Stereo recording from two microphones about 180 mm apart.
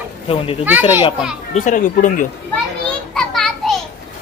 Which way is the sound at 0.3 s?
30° left (ahead or behind).